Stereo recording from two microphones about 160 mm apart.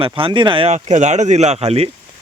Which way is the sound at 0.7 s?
45° right (ahead or behind).